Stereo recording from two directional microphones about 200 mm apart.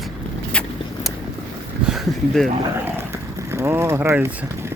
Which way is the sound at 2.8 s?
10° right (ahead or behind).